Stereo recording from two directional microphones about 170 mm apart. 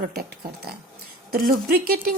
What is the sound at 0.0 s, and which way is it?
Speech, 60° right (ahead or behind).